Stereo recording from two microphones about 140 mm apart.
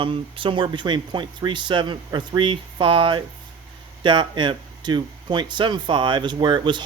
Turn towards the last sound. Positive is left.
turn(degrees=-35)  # may be behind; listen again after turning